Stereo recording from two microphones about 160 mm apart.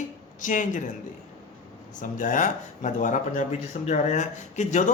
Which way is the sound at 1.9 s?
55° left (ahead or behind).